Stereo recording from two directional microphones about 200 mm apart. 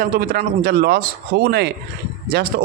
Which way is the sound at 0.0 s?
45° right (ahead or behind).